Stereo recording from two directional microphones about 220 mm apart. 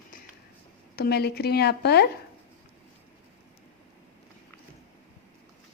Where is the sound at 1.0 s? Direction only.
45° left (ahead or behind).